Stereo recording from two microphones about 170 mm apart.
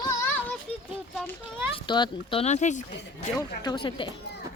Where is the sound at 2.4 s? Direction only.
45° left (ahead or behind).